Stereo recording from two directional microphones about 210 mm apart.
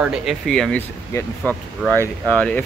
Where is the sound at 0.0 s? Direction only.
5° right (ahead or behind).